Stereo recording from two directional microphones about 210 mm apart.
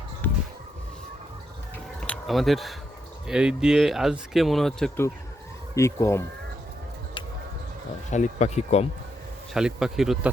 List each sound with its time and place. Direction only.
2.0 s a sound: centre (ahead or behind)
3.2 s speech: 5° right (ahead or behind)
5.7 s speech: 15° left (ahead or behind)
8.1 s speech: 35° left (ahead or behind)
9.5 s speech: 5° right (ahead or behind)